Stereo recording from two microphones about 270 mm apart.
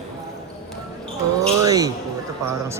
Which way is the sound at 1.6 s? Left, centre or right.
Centre.